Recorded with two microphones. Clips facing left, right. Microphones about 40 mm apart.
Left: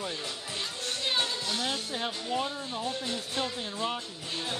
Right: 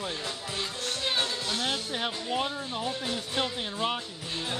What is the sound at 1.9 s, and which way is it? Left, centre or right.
Speech, right.